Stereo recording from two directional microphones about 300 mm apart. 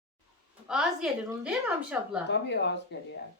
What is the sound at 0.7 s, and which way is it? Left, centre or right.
A woman's voice, centre.